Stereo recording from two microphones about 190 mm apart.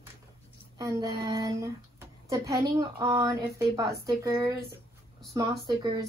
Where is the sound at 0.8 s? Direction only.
20° right (ahead or behind).